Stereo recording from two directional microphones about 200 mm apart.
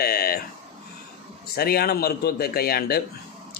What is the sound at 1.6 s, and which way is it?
A man's voice, 50° left (ahead or behind).